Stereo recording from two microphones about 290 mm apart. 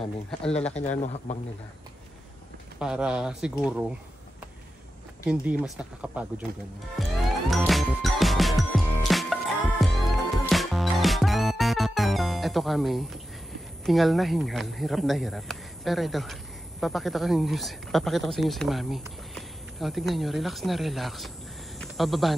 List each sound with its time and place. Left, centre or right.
0.0 s a man's voice: centre
0.8 s a man's voice: left
2.8 s a man's voice: centre
5.2 s a man's voice: centre
7.0 s music: centre
13.8 s a man's voice: centre
21.7 s snake: centre